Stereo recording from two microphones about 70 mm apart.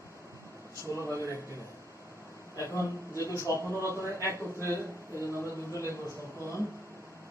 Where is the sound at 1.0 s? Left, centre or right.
Left.